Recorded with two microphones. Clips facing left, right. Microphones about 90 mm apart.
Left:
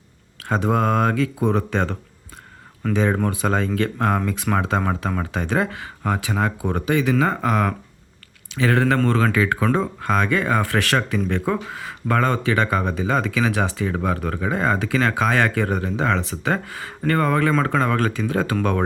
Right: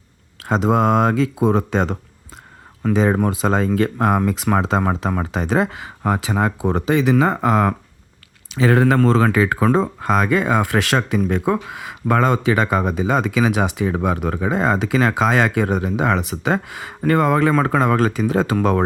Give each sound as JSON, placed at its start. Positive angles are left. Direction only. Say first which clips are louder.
{"t": 0.3, "sound": "speech", "louder": "right 3 dB", "side_deg": -20}